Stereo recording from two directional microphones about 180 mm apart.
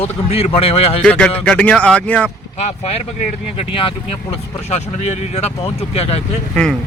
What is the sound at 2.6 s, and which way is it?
Speech, 35° left (ahead or behind).